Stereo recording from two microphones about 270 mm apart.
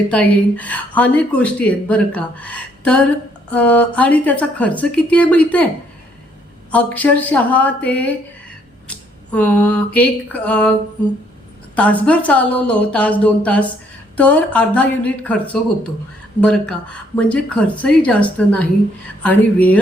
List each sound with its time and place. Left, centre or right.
0.1 s speech: centre
6.7 s speech: centre
9.3 s speech: centre
11.8 s speech: centre
16.4 s speech: centre